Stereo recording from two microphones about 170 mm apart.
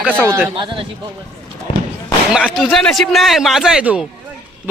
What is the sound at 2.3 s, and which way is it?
A man's voice, 5° right (ahead or behind).